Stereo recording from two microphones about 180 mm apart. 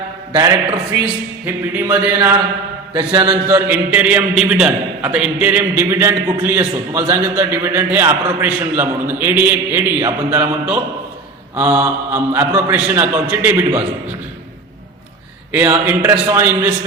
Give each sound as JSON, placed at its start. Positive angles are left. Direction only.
{"t": 0.3, "sound": "mantra", "side_deg": -20}
{"t": 1.7, "sound": "a man's voice", "side_deg": -10}
{"t": 2.9, "sound": "mantra", "side_deg": -25}
{"t": 3.5, "sound": "a man's voice", "side_deg": -10}
{"t": 15.5, "sound": "a man's voice", "side_deg": -10}